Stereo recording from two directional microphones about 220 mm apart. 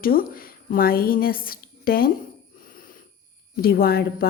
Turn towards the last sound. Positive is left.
turn(degrees=45)  # may be behind; listen again after turning